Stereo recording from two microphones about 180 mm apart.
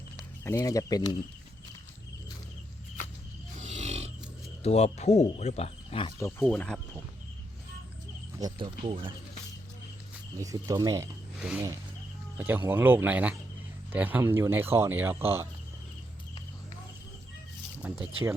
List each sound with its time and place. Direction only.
0.2 s speech: 15° left (ahead or behind)
3.6 s wild animals: 40° right (ahead or behind)
4.6 s speech: 35° left (ahead or behind)
6.1 s speech: 15° left (ahead or behind)
8.4 s speech: 25° right (ahead or behind)
10.4 s speech: 20° right (ahead or behind)
12.4 s speech: 10° right (ahead or behind)
17.8 s speech: 10° right (ahead or behind)